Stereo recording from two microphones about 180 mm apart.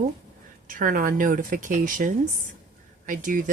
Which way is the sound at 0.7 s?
50° right (ahead or behind).